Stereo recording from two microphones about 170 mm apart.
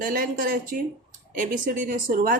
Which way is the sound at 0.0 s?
55° right (ahead or behind).